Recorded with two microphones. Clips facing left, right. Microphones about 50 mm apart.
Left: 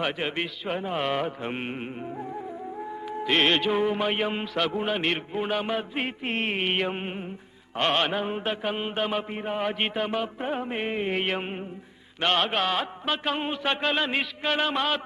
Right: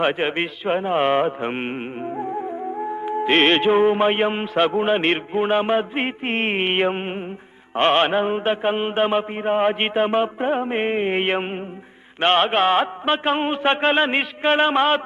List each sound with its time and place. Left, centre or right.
0.0 s speech: right